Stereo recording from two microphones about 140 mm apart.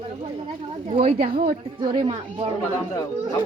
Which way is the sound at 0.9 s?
45° right (ahead or behind).